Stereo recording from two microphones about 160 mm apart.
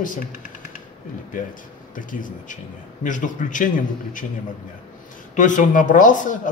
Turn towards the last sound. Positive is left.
turn(degrees=55)  # may be behind; listen again after turning